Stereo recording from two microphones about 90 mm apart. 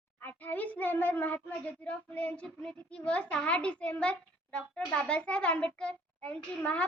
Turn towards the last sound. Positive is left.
turn(degrees=15)  # may be behind; listen again after turning